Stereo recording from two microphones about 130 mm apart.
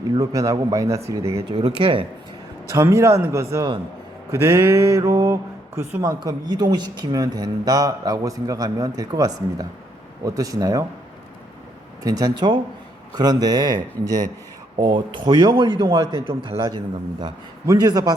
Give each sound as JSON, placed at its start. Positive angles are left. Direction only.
{"t": 0.1, "sound": "speech", "side_deg": -25}
{"t": 1.5, "sound": "a man's voice", "side_deg": -40}
{"t": 2.6, "sound": "speech", "side_deg": -20}
{"t": 12.0, "sound": "a man's voice", "side_deg": -30}